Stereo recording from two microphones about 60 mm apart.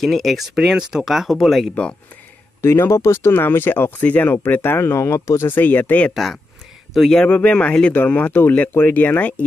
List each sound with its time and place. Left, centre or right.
0.0 s speech: centre
2.6 s speech: left
4.9 s speech: left
5.5 s speech: left
6.1 s speech: centre
7.2 s speech: left